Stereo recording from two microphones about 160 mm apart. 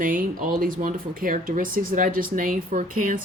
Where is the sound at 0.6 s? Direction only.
60° right (ahead or behind).